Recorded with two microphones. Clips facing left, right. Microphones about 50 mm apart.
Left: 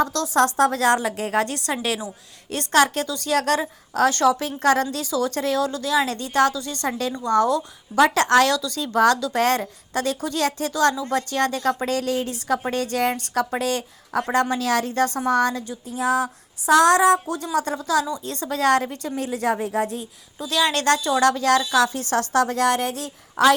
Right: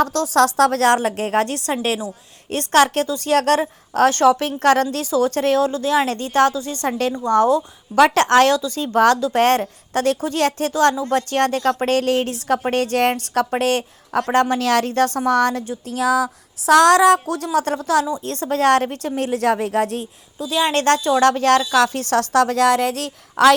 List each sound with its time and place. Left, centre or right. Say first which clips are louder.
0.3 s a woman's voice: right 3 dB; right
0.7 s a woman's voice: right 4 dB; right
5.6 s a woman's voice: right 4 dB; right
7.9 s a woman's voice: right 3 dB; right
8.5 s a woman's voice: right 4 dB; right
14.5 s a woman's voice: right 4 dB; right
15.9 s a woman's voice: right 3 dB; right
19.5 s speech: right 3 dB; right
20.6 s a woman's voice: right 3 dB; right
20.8 s a woman's voice: right 4 dB; right